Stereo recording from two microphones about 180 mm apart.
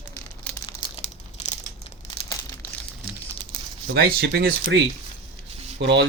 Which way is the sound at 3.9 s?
60° right (ahead or behind).